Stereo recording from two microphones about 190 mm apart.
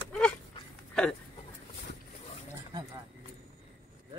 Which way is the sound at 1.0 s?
5° left (ahead or behind).